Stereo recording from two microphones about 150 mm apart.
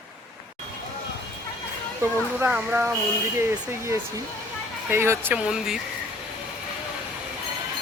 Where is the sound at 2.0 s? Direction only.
15° right (ahead or behind).